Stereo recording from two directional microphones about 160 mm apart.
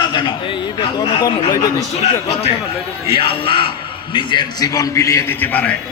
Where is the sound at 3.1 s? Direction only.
30° left (ahead or behind); by 5.7 s 10° left (ahead or behind).